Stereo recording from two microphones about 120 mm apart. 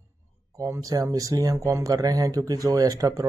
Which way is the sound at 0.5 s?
25° right (ahead or behind).